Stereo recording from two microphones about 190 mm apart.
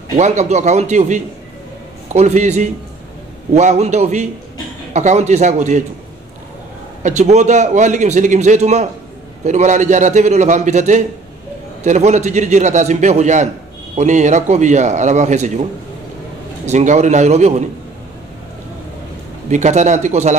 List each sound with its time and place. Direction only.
0.2 s a man's voice: 40° right (ahead or behind)
7.0 s a man's voice: 40° right (ahead or behind)
16.6 s a man's voice: 40° right (ahead or behind)
19.5 s a man's voice: 40° right (ahead or behind)